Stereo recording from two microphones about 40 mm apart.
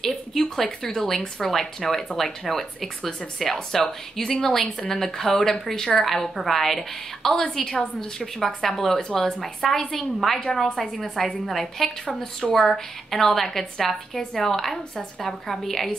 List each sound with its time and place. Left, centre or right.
0.0 s a woman's voice: centre
8.4 s a woman's voice: centre